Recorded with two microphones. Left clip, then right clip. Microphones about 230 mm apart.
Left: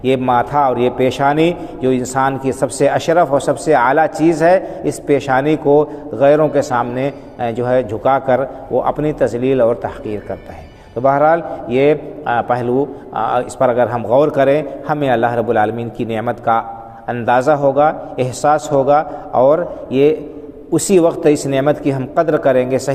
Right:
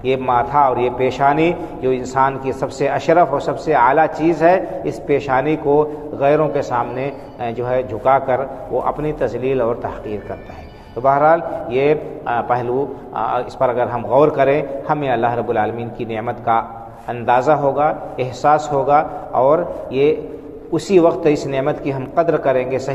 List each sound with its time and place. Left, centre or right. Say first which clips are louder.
0.0 s a man's voice: left 2 dB; left